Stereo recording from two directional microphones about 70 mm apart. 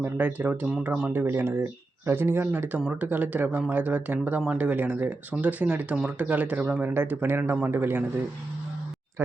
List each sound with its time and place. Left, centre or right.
0.0 s speech: right
1.1 s speech: right
2.7 s speech: right
6.9 s speech: right